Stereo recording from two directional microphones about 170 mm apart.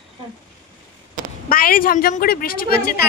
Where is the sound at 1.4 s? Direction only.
55° left (ahead or behind).